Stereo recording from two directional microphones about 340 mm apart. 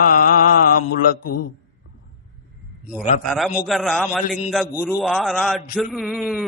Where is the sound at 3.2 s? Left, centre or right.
Centre.